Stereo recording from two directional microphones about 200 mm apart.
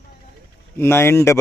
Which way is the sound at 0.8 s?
10° left (ahead or behind).